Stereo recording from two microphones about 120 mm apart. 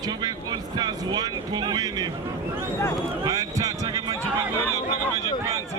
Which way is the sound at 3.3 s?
30° right (ahead or behind).